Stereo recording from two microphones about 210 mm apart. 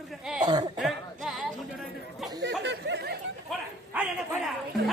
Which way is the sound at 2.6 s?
55° right (ahead or behind).